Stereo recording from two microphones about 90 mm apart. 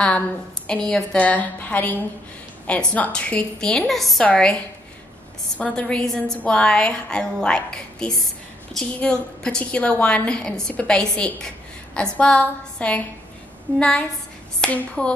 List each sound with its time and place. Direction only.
0.7 s a woman's voice: 5° left (ahead or behind)
5.6 s a woman's voice: 10° left (ahead or behind)